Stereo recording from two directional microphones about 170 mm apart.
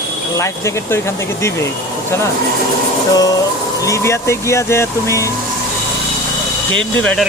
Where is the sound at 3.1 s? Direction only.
20° left (ahead or behind).